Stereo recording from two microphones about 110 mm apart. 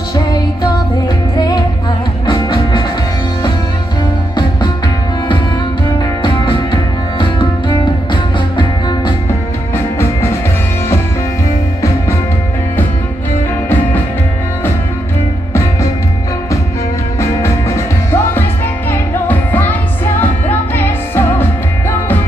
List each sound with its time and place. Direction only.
0.1 s music: 40° left (ahead or behind)
6.2 s music: 50° left (ahead or behind)
17.2 s music: 25° left (ahead or behind)